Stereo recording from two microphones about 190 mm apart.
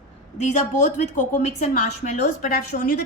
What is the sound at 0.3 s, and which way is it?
A woman's voice, 40° left (ahead or behind).